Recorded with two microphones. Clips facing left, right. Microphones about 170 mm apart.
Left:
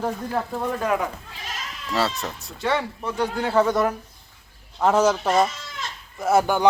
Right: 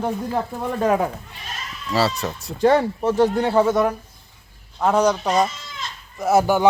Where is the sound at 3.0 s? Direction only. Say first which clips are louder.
Right 7 dB; 30° right (ahead or behind).